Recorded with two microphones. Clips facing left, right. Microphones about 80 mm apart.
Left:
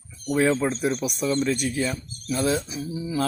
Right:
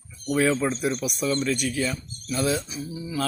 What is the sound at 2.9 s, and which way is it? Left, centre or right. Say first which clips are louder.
Speech: left 3 dB; left.